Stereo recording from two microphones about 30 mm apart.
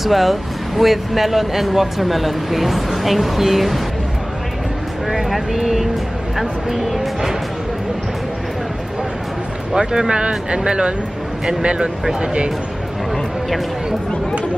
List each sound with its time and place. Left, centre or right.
0.0 s speech: centre
5.3 s speech: centre
9.8 s speech: right